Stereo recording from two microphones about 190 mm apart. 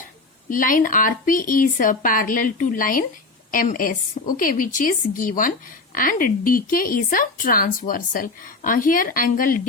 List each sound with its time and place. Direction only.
0.5 s a woman's voice: 45° left (ahead or behind)